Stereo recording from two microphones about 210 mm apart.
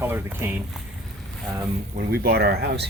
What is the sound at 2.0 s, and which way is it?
Speech, 45° right (ahead or behind).